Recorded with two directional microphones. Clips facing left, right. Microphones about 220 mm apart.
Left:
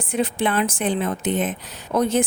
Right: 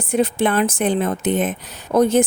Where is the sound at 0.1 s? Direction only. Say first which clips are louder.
Right 4 dB; 40° right (ahead or behind).